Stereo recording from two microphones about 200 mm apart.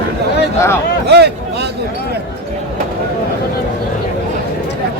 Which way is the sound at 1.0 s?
55° right (ahead or behind).